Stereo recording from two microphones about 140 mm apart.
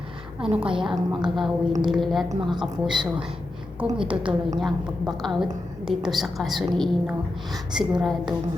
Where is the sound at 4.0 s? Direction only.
40° right (ahead or behind).